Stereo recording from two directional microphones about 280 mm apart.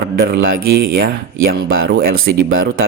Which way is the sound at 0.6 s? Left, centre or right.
Right.